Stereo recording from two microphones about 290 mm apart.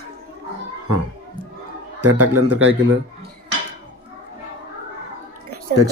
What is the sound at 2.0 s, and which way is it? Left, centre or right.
A man's voice, right.